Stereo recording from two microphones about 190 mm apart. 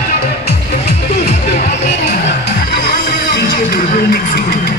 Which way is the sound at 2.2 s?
60° left (ahead or behind).